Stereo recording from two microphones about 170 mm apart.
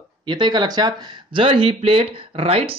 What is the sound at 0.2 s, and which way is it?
Speech, 25° right (ahead or behind).